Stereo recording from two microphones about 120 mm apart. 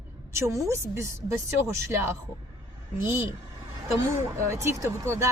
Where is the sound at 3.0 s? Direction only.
20° right (ahead or behind).